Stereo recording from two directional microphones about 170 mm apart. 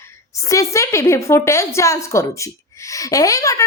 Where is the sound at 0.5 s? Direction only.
20° left (ahead or behind).